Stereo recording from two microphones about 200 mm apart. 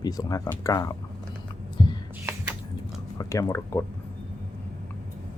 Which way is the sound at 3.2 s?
15° left (ahead or behind).